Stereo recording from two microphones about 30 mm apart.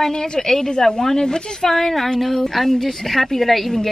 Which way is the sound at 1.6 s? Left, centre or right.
Centre.